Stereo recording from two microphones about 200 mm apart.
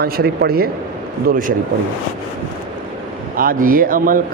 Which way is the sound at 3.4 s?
45° right (ahead or behind).